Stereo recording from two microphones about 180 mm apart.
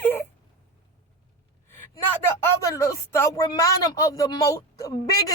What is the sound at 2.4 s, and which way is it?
Speech, 15° left (ahead or behind).